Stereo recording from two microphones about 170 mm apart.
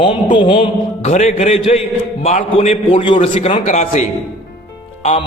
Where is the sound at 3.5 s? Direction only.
45° left (ahead or behind).